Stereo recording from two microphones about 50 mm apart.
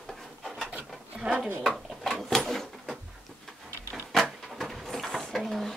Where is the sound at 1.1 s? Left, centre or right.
Right.